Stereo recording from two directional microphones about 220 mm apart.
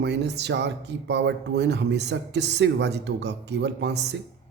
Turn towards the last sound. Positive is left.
turn(degrees=-50)  # may be behind; listen again after turning